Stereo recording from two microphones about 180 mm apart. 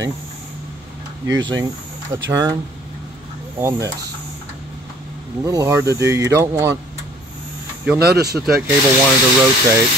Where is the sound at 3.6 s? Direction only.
15° right (ahead or behind).